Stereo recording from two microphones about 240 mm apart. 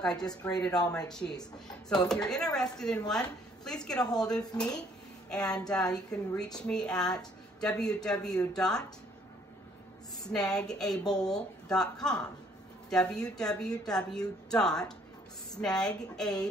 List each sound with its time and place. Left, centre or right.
0.0 s a woman's voice: centre
0.3 s a woman's voice: centre
0.8 s a woman's voice: centre
10.2 s a woman's voice: centre